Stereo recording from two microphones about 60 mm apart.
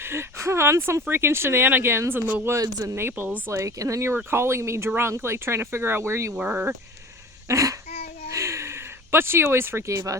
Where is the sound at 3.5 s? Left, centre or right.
Right.